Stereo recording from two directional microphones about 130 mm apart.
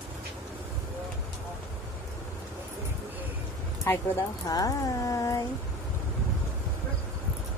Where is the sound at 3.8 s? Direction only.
20° left (ahead or behind).